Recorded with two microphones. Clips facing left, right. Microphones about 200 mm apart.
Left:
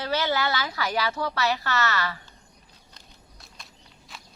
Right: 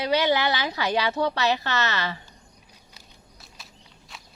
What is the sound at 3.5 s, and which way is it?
Walk, centre (ahead or behind).